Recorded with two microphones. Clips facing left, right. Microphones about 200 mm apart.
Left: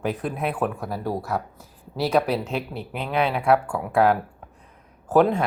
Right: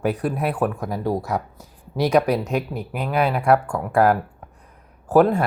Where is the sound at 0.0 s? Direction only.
5° right (ahead or behind).